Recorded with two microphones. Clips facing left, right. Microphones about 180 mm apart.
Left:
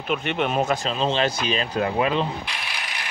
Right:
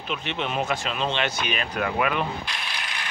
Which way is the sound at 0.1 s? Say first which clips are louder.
Left 5 dB; 55° left (ahead or behind).